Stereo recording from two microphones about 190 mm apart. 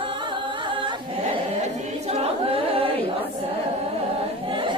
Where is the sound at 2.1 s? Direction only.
30° right (ahead or behind).